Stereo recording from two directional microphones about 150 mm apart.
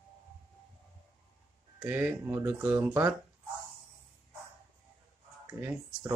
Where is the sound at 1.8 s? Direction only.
10° right (ahead or behind).